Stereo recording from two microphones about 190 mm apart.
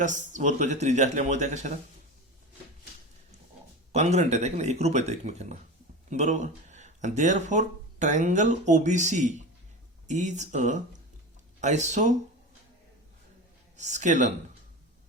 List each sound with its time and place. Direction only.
0.0 s speech: 40° right (ahead or behind)
3.9 s speech: 35° right (ahead or behind)
13.7 s speech: 40° right (ahead or behind)